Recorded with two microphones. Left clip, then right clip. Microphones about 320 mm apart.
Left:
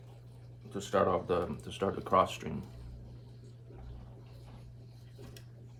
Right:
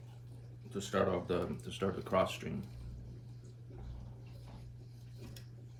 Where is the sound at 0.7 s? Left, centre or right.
Centre.